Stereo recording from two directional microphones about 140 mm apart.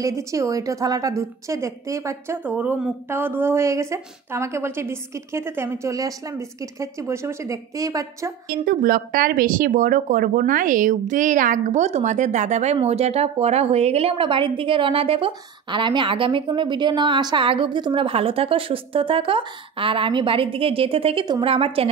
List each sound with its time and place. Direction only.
0.0 s a woman's voice: 20° right (ahead or behind)
8.5 s speech: 90° right; by 21.9 s 40° right (ahead or behind)